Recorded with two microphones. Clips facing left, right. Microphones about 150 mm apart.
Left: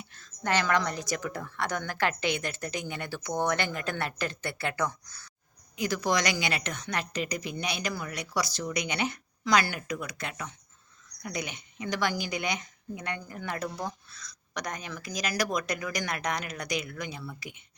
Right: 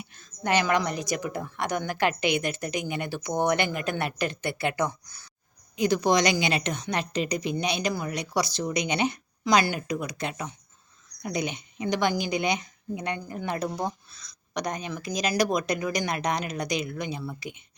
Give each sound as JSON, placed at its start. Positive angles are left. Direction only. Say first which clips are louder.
{"t": 0.0, "sound": "a woman's voice", "louder": "right 3 dB", "side_deg": -15}